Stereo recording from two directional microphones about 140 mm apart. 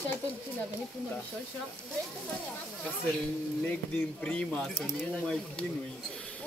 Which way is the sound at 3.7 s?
10° left (ahead or behind).